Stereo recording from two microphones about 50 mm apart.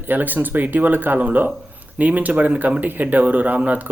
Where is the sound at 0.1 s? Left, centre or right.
Right.